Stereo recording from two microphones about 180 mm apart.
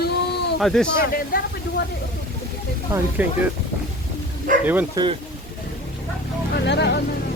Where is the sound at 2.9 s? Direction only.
10° right (ahead or behind).